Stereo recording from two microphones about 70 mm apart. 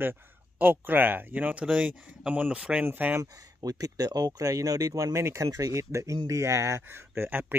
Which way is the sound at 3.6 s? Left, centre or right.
Right.